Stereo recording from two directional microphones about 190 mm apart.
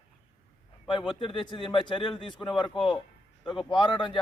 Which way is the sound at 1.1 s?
25° left (ahead or behind).